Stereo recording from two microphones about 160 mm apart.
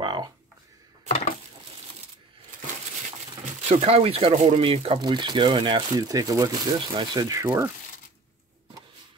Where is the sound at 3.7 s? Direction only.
40° right (ahead or behind); by 7.7 s 15° right (ahead or behind).